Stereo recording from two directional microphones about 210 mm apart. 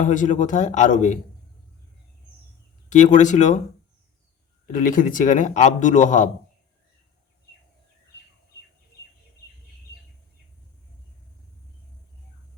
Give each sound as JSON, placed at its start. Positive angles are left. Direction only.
{"t": 0.0, "sound": "a man's voice", "side_deg": 35}
{"t": 2.9, "sound": "a man's voice", "side_deg": 35}
{"t": 4.6, "sound": "a man's voice", "side_deg": 40}